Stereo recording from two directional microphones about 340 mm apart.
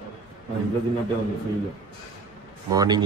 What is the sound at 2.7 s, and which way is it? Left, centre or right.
Speech, centre.